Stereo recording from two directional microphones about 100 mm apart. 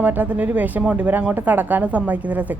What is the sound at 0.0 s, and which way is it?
Speech, 15° right (ahead or behind).